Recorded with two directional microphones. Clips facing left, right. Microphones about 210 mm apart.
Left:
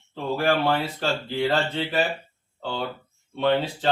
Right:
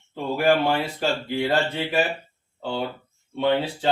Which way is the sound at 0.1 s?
15° right (ahead or behind).